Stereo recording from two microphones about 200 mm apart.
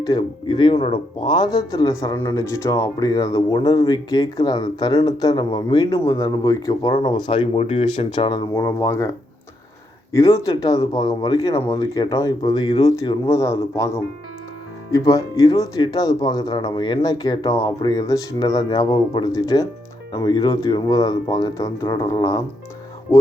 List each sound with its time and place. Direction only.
0.0 s speech: 20° left (ahead or behind)